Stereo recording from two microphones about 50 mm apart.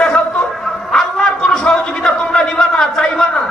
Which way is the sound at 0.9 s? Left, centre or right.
Centre.